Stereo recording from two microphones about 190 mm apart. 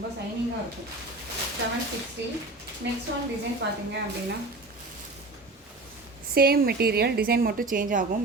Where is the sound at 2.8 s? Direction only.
70° right (ahead or behind).